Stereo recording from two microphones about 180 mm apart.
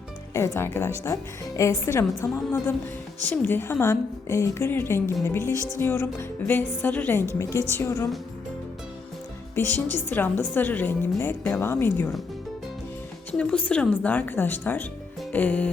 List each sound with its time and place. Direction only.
0.3 s a woman's voice: 15° left (ahead or behind)
3.2 s a woman's voice: 10° left (ahead or behind)
9.6 s a woman's voice: 10° left (ahead or behind)
13.3 s a woman's voice: 5° left (ahead or behind)
15.2 s music: 10° left (ahead or behind)